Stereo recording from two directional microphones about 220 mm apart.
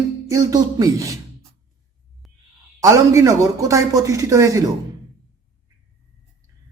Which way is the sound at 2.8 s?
15° right (ahead or behind).